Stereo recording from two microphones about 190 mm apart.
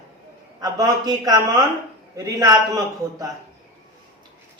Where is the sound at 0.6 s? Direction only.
20° right (ahead or behind).